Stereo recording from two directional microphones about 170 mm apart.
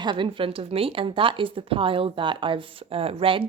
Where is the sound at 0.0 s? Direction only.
25° right (ahead or behind).